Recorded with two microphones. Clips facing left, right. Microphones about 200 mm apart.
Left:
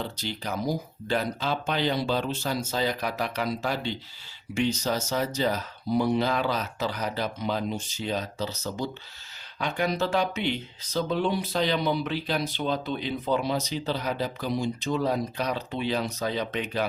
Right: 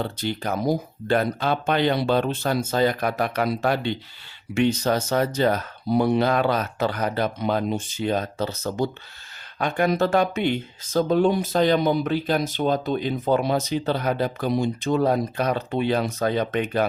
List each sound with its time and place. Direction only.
0.0 s speech: 55° right (ahead or behind)